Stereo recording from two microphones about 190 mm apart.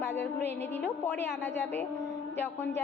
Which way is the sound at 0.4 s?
10° left (ahead or behind).